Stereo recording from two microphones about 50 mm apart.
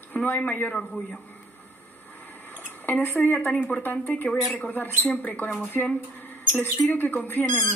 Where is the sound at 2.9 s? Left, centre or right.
Left.